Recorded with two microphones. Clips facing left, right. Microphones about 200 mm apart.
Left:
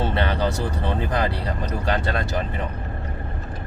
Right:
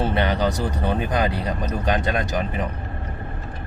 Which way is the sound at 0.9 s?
20° right (ahead or behind).